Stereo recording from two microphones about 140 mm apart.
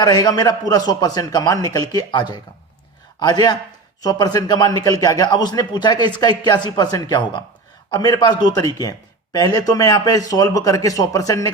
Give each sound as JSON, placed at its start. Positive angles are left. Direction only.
{"t": 0.0, "sound": "a man's voice", "side_deg": 30}